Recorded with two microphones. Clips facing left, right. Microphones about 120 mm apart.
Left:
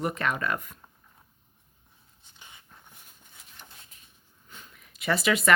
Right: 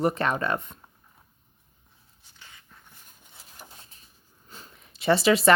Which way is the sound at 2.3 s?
20° left (ahead or behind).